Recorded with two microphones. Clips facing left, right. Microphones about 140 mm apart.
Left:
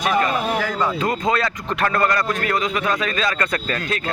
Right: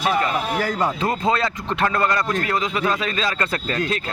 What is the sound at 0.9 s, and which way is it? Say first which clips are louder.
A man's voice: even; 30° right (ahead or behind).